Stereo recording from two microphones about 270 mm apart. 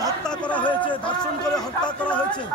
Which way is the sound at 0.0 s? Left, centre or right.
Centre.